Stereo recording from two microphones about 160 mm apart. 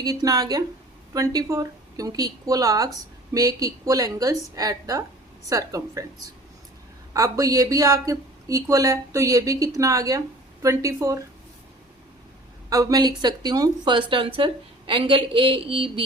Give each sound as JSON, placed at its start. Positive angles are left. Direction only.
{"t": 0.0, "sound": "speech", "side_deg": -25}
{"t": 7.1, "sound": "speech", "side_deg": -20}
{"t": 12.7, "sound": "speech", "side_deg": -20}